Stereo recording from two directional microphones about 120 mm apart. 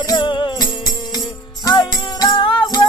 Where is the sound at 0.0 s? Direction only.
35° left (ahead or behind).